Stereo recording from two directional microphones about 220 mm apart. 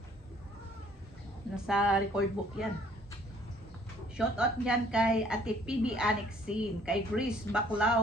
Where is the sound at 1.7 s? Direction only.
5° right (ahead or behind).